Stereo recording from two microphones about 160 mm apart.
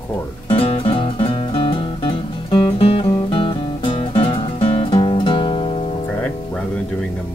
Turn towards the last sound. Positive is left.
turn(degrees=10)  # may be behind; listen again after turning